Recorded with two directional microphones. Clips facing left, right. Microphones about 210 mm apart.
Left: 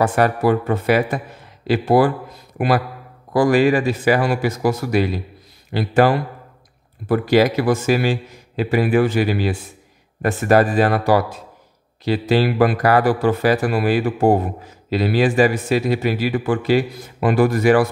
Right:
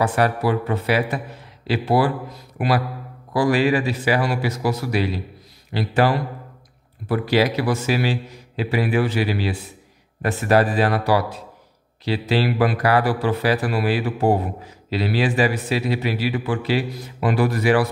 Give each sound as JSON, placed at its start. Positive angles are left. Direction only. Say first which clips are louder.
{"t": 0.0, "sound": "a man's voice", "louder": "left 3 dB", "side_deg": 45}
{"t": 3.3, "sound": "a man's voice", "louder": "left 4 dB", "side_deg": 45}